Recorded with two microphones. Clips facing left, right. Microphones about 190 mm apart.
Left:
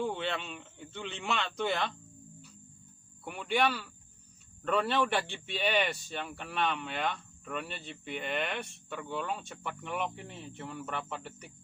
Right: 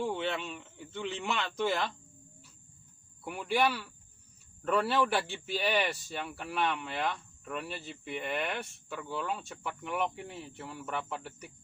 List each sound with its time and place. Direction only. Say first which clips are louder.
0.0 s speech: right 1 dB; centre (ahead or behind)
3.2 s speech: right 1 dB; 5° right (ahead or behind)